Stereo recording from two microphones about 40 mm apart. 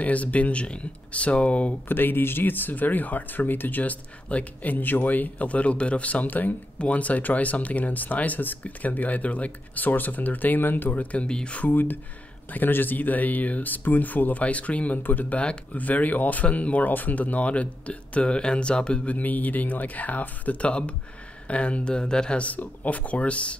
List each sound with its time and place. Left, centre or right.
0.0 s speech: left
1.9 s speech: left
6.2 s speech: left
6.8 s speech: left
11.0 s speech: left
11.2 s speech: left
11.7 s speech: left
19.1 s speech: left
22.4 s speech: left